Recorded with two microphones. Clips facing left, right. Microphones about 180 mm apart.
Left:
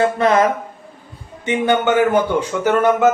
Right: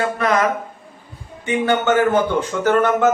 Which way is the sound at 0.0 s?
25° left (ahead or behind).